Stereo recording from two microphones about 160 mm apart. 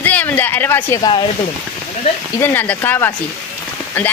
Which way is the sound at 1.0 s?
30° left (ahead or behind).